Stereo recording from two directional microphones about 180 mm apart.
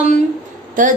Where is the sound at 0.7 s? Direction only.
45° right (ahead or behind).